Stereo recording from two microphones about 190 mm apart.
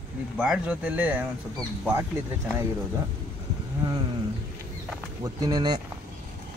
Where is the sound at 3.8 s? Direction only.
20° right (ahead or behind).